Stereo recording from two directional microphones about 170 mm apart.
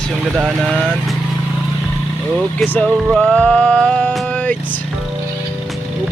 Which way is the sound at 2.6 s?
10° left (ahead or behind).